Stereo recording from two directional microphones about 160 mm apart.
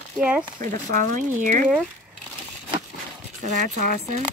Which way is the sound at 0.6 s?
55° right (ahead or behind).